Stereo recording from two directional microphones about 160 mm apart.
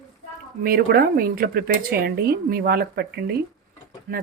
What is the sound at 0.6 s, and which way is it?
Speech, 70° right (ahead or behind).